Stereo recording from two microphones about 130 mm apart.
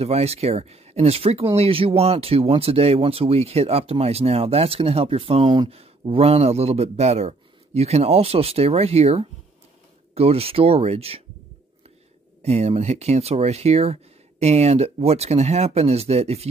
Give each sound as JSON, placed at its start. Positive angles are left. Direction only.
{"t": 0.0, "sound": "speech", "side_deg": -50}
{"t": 5.7, "sound": "speech", "side_deg": -50}
{"t": 12.4, "sound": "speech", "side_deg": -55}